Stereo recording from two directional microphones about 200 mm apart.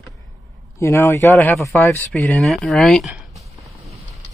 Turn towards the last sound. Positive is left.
turn(degrees=0)  # may be behind; listen again after turning